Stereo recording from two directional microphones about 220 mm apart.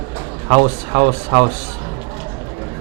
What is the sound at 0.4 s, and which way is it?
A man's voice, 25° right (ahead or behind).